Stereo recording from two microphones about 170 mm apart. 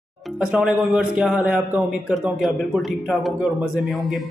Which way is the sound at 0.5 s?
5° right (ahead or behind).